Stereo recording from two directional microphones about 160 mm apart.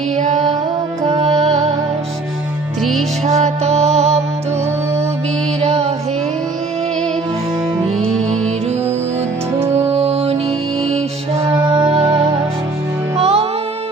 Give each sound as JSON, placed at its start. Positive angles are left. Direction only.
{"t": 0.2, "sound": "music", "side_deg": -45}
{"t": 3.2, "sound": "music", "side_deg": -45}
{"t": 5.5, "sound": "music", "side_deg": -40}
{"t": 9.9, "sound": "music", "side_deg": -40}
{"t": 11.6, "sound": "music", "side_deg": -15}
{"t": 13.1, "sound": "music", "side_deg": -40}